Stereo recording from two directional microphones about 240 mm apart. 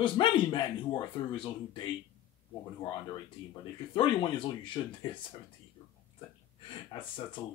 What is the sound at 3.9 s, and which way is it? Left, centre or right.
Speech, left.